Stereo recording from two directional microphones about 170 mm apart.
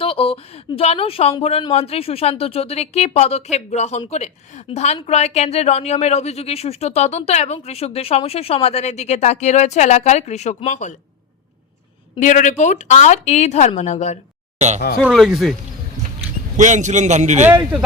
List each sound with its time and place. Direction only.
0.0 s speech: 35° left (ahead or behind)
12.2 s speech: 45° left (ahead or behind)
14.6 s a man's voice: 40° right (ahead or behind)
14.9 s speech: centre (ahead or behind)
16.6 s a man's voice: 45° right (ahead or behind)
17.4 s a man's voice: 10° right (ahead or behind)